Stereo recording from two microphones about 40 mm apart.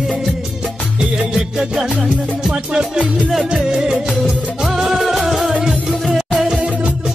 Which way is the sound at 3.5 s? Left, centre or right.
Centre.